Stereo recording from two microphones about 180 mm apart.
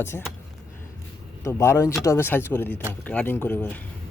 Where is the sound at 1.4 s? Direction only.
15° left (ahead or behind).